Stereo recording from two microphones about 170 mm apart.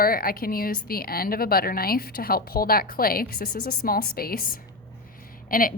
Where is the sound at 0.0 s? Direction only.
60° left (ahead or behind).